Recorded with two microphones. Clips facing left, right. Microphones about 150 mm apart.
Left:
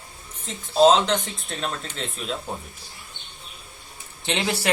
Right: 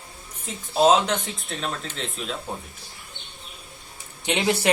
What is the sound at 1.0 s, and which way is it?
Speech, centre (ahead or behind).